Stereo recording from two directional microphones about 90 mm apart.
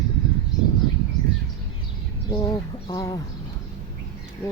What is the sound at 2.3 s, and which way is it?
Speech, 50° left (ahead or behind).